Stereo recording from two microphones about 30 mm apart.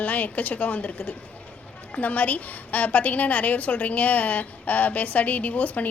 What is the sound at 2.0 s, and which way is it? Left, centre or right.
A woman's voice, left.